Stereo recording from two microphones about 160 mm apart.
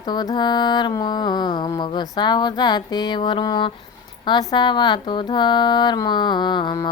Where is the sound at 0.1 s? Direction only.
25° left (ahead or behind).